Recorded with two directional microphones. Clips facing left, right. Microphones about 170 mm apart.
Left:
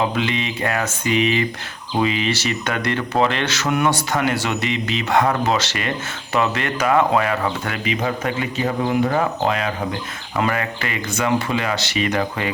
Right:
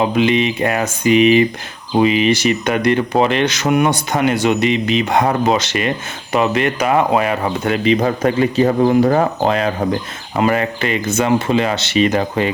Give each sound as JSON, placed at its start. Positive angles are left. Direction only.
{"t": 0.0, "sound": "speech", "side_deg": -20}
{"t": 7.9, "sound": "speech", "side_deg": -35}